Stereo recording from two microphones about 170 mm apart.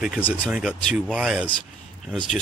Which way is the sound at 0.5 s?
5° right (ahead or behind).